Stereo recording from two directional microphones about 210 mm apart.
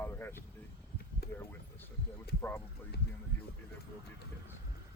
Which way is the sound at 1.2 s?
50° left (ahead or behind).